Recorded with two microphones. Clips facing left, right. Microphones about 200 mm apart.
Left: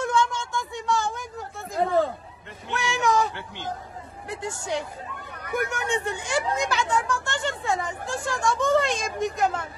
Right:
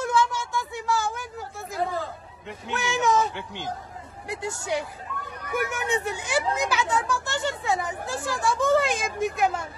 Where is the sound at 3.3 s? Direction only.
15° right (ahead or behind).